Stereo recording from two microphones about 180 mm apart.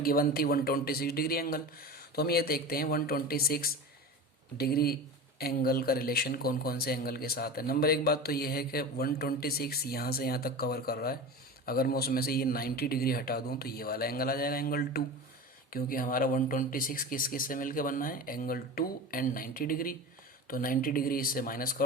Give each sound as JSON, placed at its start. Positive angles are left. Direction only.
{"t": 0.0, "sound": "speech", "side_deg": 55}